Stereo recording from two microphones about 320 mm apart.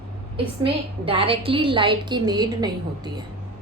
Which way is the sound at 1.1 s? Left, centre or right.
Centre.